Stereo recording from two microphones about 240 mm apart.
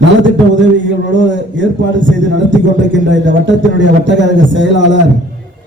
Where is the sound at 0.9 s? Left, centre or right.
Right.